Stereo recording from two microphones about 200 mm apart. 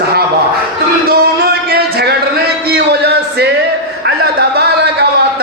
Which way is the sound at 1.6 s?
55° right (ahead or behind).